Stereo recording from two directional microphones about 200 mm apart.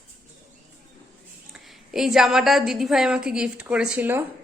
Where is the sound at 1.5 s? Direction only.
Centre (ahead or behind).